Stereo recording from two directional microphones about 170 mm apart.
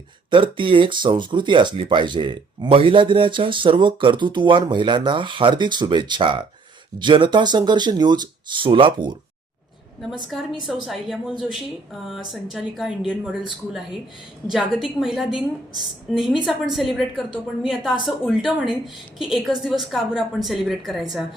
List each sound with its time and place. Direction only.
0.3 s speech: 30° right (ahead or behind)
10.8 s a woman's voice: 5° right (ahead or behind)
14.5 s a woman's voice: centre (ahead or behind)
19.2 s a woman's voice: centre (ahead or behind)